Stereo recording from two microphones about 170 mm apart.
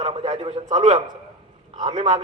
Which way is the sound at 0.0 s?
35° right (ahead or behind).